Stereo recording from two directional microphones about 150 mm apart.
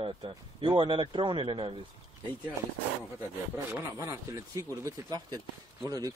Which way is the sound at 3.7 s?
20° right (ahead or behind).